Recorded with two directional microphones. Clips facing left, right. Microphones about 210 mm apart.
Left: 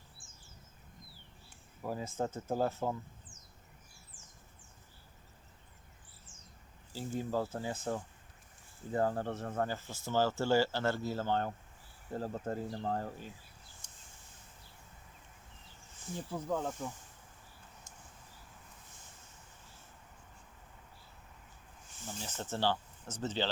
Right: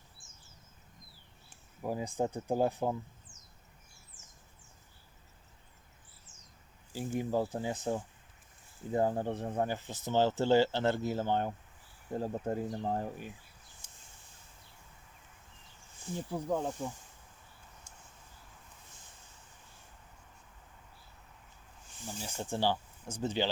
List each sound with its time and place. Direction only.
0.2 s a sound: 30° left (ahead or behind)
1.8 s speech: 15° right (ahead or behind)
6.9 s speech: 15° right (ahead or behind)
16.3 s speech: 15° right (ahead or behind)
22.0 s speech: 10° right (ahead or behind)